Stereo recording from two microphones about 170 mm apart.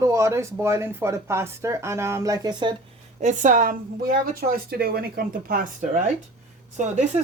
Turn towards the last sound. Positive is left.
turn(degrees=-45)  # may be behind; listen again after turning